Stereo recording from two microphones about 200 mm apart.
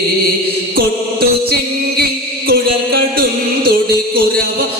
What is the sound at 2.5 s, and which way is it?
Music, 50° right (ahead or behind).